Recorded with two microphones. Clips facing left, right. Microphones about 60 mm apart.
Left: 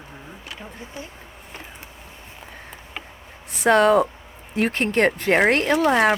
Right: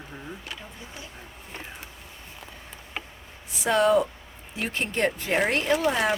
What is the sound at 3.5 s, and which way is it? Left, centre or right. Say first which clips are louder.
Speech: left 5 dB; left.